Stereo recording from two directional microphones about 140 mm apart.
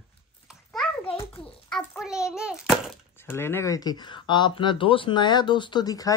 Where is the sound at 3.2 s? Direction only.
15° left (ahead or behind).